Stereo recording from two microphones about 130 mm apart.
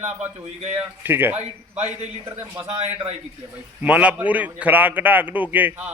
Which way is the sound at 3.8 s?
10° right (ahead or behind).